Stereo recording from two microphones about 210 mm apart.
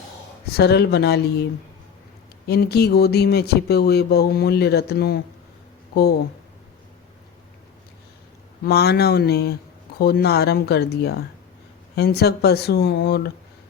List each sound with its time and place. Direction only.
0.4 s speech: 50° left (ahead or behind)
2.5 s speech: 50° left (ahead or behind)
8.6 s speech: 50° left (ahead or behind)